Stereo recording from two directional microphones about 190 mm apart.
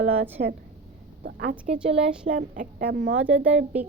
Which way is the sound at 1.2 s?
55° right (ahead or behind).